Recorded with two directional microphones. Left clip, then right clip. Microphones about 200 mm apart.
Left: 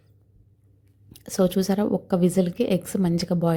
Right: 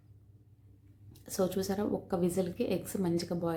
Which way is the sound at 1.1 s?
35° left (ahead or behind).